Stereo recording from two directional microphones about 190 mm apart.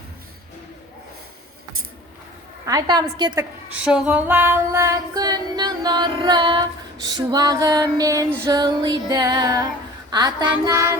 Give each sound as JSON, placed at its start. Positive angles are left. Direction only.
{"t": 2.6, "sound": "female singing", "side_deg": -20}
{"t": 3.7, "sound": "female singing", "side_deg": -5}
{"t": 10.1, "sound": "child singing", "side_deg": -20}